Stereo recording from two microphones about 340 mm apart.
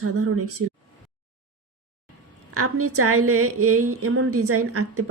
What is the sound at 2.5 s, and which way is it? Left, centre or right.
A woman's voice, right.